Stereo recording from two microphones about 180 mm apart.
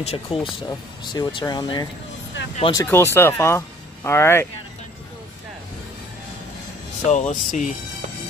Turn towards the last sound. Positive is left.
turn(degrees=45)  # may be behind; listen again after turning